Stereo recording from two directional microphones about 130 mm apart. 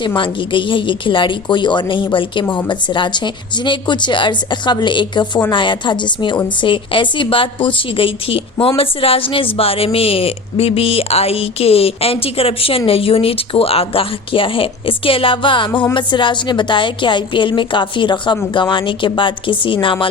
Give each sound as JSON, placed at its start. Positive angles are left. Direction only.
{"t": 0.0, "sound": "a woman's voice", "side_deg": 40}